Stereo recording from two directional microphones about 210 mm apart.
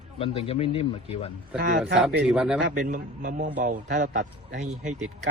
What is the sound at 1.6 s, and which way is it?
Speech, 45° right (ahead or behind).